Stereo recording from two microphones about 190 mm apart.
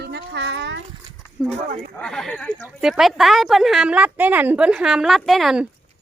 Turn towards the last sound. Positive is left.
turn(degrees=0)  # may be behind; listen again after turning